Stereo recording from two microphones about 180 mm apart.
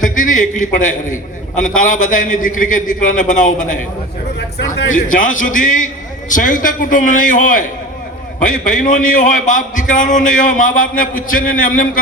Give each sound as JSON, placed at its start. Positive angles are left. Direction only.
{"t": 0.0, "sound": "a man's voice", "side_deg": 45}
{"t": 4.4, "sound": "speech", "side_deg": 65}
{"t": 4.9, "sound": "a man's voice", "side_deg": 45}